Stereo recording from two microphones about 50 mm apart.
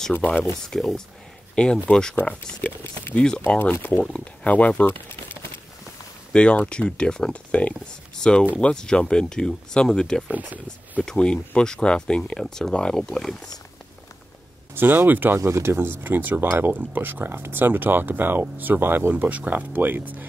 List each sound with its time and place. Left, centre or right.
0.7 s speech: centre
1.5 s speech: left
2.2 s speech: left
3.2 s speech: centre
3.4 s speech: left
3.7 s speech: left
4.0 s speech: centre
4.5 s speech: left
6.3 s speech: left
10.3 s speech: right
11.1 s speech: centre
14.8 s speech: right
15.4 s speech: right
19.1 s speech: right